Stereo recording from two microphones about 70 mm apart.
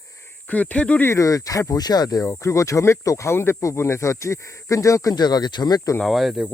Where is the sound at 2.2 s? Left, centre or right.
Left.